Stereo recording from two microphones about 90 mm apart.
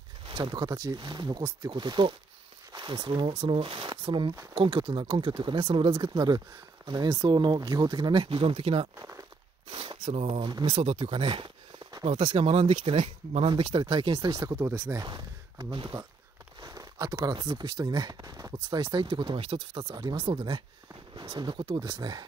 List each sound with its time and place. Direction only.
0.4 s speech: 50° right (ahead or behind); by 8.8 s 80° right
9.7 s speech: 60° right (ahead or behind); by 10.5 s 80° right
10.5 s speech: 60° right (ahead or behind)
12.4 s speech: 90° right; by 14.1 s 60° right (ahead or behind)
14.6 s speech: 25° right (ahead or behind)
15.0 s speech: 60° right (ahead or behind)
16.6 s a sound: 40° right (ahead or behind)
17.3 s speech: 50° right (ahead or behind); by 19.8 s 75° right (ahead or behind)
19.8 s speech: 45° right (ahead or behind)